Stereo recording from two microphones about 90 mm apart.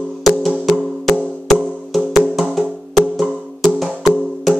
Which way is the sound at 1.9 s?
5° right (ahead or behind).